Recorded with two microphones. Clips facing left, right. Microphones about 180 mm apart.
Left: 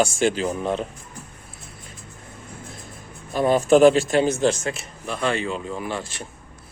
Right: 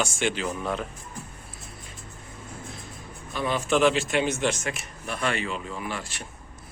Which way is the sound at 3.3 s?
40° left (ahead or behind).